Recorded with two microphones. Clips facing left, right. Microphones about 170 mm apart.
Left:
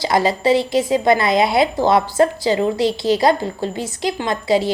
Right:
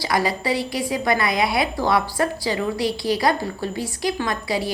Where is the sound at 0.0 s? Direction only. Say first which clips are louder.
Left 6 dB; 25° left (ahead or behind).